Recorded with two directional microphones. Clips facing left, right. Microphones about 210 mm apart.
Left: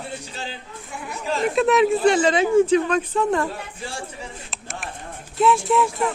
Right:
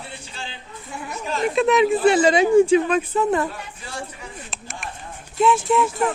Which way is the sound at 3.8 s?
30° left (ahead or behind).